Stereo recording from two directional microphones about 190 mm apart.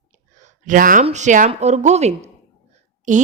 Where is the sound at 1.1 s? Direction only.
40° right (ahead or behind).